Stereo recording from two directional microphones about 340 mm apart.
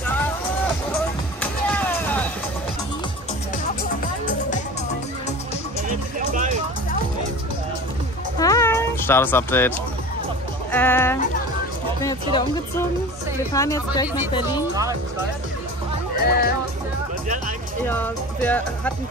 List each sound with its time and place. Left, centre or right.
1.4 s a sound: centre
5.9 s music: right
8.4 s music: centre
10.7 s speech: centre
14.0 s speech: centre
16.3 s speech: left
17.8 s speech: centre